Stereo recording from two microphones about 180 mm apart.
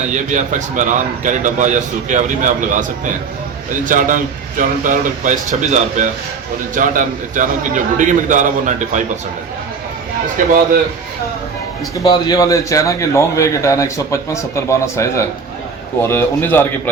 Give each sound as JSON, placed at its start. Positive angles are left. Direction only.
{"t": 0.1, "sound": "a man's voice", "side_deg": -40}
{"t": 3.8, "sound": "a man's voice", "side_deg": -45}
{"t": 10.3, "sound": "a man's voice", "side_deg": -50}
{"t": 12.0, "sound": "a man's voice", "side_deg": 20}